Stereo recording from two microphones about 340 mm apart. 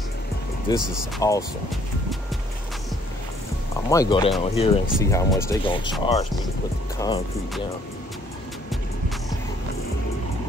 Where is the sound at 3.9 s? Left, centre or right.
Centre.